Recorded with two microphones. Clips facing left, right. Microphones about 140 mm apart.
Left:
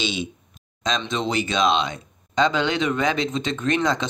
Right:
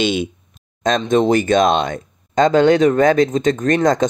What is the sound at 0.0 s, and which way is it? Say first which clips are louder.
Speech: right 9 dB; 55° right (ahead or behind).